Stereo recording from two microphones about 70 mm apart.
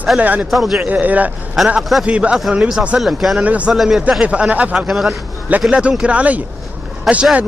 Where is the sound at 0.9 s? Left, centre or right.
Right.